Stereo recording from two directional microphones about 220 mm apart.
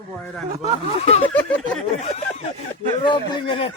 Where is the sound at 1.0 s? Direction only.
30° left (ahead or behind).